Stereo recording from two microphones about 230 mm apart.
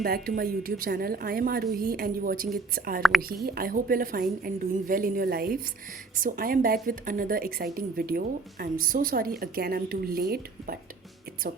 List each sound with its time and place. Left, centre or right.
0.0 s speech: right